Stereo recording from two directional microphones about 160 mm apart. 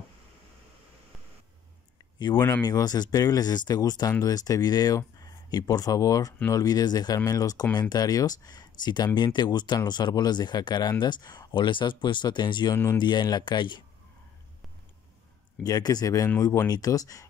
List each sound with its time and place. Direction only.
2.1 s speech: 25° left (ahead or behind)
12.7 s speech: 15° left (ahead or behind)
13.0 s speech: 25° left (ahead or behind)
15.6 s speech: 25° left (ahead or behind)